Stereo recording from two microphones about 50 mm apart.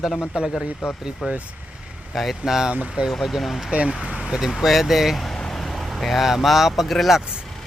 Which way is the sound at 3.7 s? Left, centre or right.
Right.